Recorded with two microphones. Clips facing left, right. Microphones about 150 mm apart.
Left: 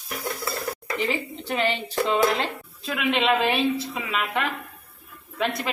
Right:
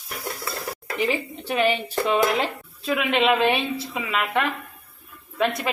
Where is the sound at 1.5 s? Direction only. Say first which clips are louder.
Right 4 dB; 5° right (ahead or behind).